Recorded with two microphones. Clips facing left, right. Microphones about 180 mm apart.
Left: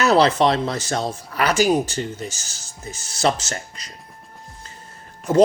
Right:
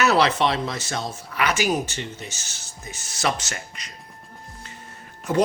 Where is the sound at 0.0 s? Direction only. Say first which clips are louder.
Left 4 dB; 30° left (ahead or behind).